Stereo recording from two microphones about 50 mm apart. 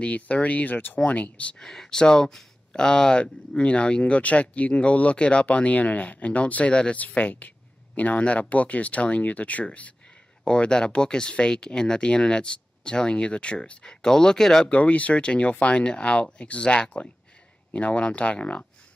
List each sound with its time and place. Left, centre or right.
0.0 s speech: left
1.6 s speech: centre
14.7 s speech: left